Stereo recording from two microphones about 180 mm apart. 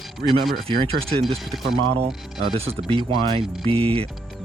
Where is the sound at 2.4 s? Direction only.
30° right (ahead or behind).